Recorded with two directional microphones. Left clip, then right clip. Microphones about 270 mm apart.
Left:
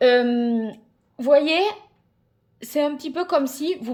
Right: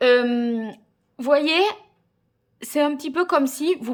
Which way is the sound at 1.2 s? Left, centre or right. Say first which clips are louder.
Left 1 dB; centre.